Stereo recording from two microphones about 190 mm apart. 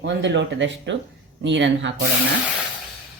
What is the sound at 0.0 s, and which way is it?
Speech, 70° right (ahead or behind).